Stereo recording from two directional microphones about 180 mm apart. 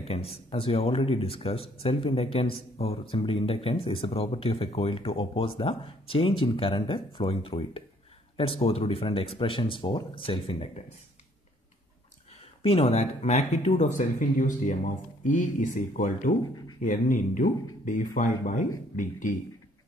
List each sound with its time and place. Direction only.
0.1 s speech: 35° left (ahead or behind)
12.6 s speech: 35° left (ahead or behind)